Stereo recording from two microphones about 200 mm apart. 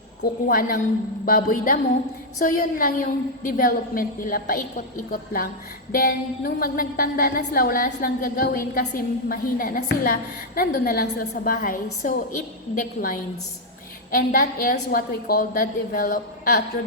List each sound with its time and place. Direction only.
0.2 s a woman's voice: 50° left (ahead or behind)